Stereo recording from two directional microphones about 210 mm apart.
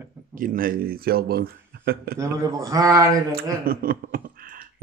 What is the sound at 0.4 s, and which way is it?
Speech, 40° right (ahead or behind).